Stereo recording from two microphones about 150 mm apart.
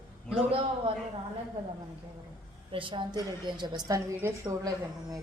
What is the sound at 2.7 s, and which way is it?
A man's voice, 35° right (ahead or behind).